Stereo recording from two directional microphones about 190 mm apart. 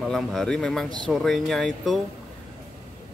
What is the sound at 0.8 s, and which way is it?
Speech, 25° right (ahead or behind).